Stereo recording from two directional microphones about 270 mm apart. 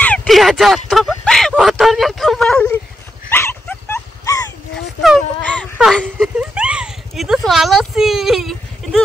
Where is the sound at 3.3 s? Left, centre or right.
Centre.